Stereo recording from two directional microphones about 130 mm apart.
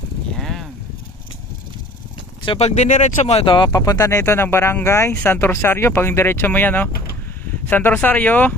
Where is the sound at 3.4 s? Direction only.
35° left (ahead or behind).